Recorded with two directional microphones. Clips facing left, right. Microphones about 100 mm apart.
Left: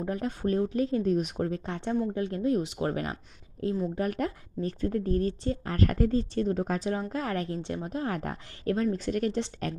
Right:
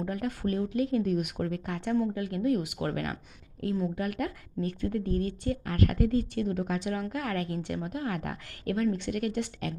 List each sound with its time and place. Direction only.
0.0 s speech: 30° left (ahead or behind)